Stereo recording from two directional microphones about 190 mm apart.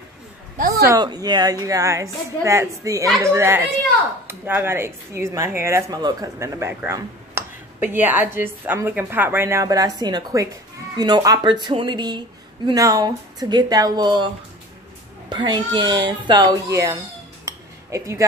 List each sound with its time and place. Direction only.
0.6 s a sound: 45° right (ahead or behind)
0.8 s speech: 20° right (ahead or behind)
17.5 s cutlery: 15° right (ahead or behind)